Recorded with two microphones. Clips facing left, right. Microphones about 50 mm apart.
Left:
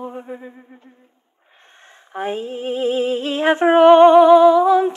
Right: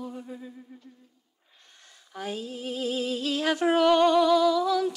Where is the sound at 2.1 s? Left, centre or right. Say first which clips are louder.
Left 10 dB; left.